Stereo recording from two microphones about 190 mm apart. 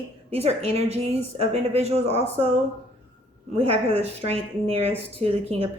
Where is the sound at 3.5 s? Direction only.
30° right (ahead or behind).